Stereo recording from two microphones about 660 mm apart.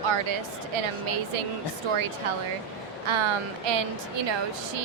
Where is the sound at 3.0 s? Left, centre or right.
Right.